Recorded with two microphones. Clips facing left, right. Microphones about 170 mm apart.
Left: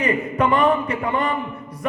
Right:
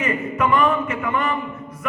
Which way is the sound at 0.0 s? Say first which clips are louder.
Left 2 dB; 35° left (ahead or behind).